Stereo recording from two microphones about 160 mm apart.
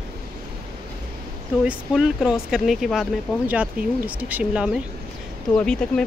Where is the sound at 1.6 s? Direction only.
5° right (ahead or behind).